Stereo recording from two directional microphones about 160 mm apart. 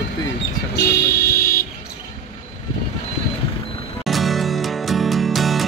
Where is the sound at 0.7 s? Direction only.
90° left; by 1.7 s 75° left (ahead or behind).